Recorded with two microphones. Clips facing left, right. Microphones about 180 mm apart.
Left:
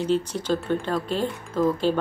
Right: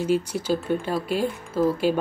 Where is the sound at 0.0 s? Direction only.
10° right (ahead or behind).